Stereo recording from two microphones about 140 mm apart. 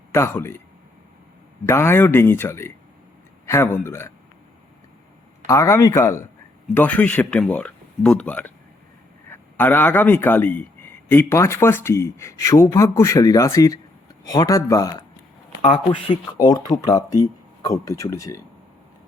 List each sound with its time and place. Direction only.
0.1 s speech: 20° left (ahead or behind)
1.6 s speech: 15° left (ahead or behind)
5.5 s speech: 20° left (ahead or behind)
16.4 s speech: 30° left (ahead or behind)